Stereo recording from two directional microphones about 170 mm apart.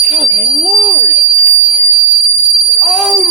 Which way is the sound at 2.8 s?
Centre (ahead or behind).